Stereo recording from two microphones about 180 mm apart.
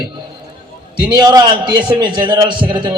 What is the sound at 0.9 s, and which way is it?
A man's voice, 25° right (ahead or behind).